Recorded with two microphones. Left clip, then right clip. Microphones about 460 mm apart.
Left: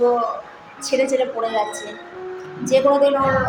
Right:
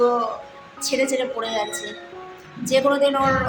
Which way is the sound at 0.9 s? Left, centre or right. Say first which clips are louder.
Left 3 dB; right.